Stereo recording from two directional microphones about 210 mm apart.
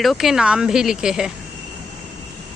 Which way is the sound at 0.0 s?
Centre (ahead or behind).